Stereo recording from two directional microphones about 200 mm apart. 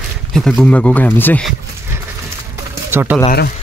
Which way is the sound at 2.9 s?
10° right (ahead or behind).